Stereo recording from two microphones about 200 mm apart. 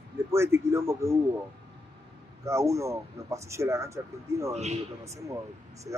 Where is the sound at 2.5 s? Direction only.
15° right (ahead or behind).